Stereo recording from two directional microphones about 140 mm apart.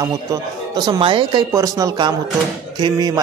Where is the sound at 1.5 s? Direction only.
25° right (ahead or behind).